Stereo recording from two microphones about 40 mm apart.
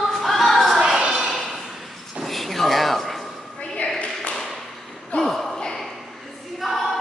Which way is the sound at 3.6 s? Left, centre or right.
Left.